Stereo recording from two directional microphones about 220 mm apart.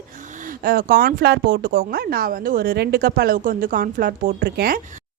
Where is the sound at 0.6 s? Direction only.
40° right (ahead or behind).